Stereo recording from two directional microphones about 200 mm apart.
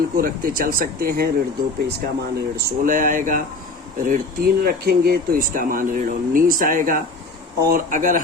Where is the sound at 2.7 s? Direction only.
40° right (ahead or behind).